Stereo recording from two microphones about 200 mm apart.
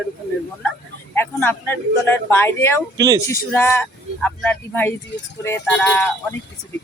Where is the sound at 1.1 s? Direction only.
10° left (ahead or behind).